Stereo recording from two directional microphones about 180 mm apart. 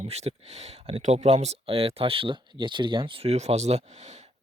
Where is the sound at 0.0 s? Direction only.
35° right (ahead or behind).